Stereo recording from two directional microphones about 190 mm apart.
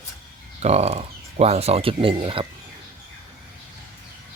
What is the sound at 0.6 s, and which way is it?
Speech, 35° right (ahead or behind).